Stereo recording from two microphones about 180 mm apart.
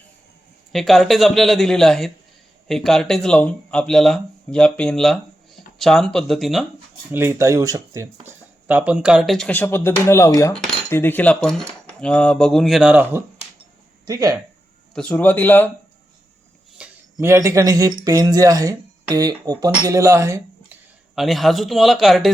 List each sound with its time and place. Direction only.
0.7 s speech: centre (ahead or behind)
7.1 s speech: 15° right (ahead or behind)
14.9 s speech: 10° left (ahead or behind)
16.8 s a sound: 5° right (ahead or behind)
17.2 s speech: 15° right (ahead or behind)
21.2 s speech: centre (ahead or behind)